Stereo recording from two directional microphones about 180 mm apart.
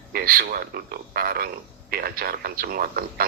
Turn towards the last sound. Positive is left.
turn(degrees=-55)  # may be behind; listen again after turning